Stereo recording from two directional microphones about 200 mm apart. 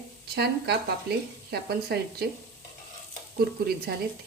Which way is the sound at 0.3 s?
55° right (ahead or behind).